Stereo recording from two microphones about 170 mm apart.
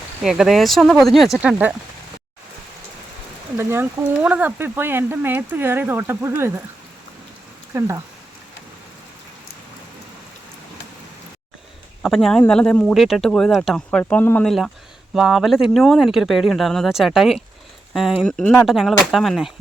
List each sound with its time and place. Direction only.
0.2 s speech: centre (ahead or behind)
3.6 s speech: 15° right (ahead or behind)
7.7 s speech: 15° right (ahead or behind)
12.0 s speech: centre (ahead or behind)